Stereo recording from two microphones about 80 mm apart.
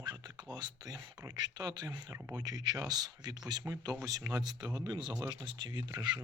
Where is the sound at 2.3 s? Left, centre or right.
Right.